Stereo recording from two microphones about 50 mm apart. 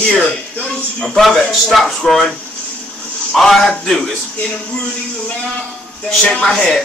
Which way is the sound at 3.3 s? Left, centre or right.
Centre.